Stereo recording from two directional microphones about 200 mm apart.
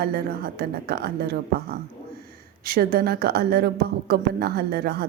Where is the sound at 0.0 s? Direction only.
50° right (ahead or behind).